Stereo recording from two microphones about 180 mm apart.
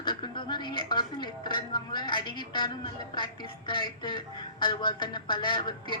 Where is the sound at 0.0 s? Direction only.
25° left (ahead or behind).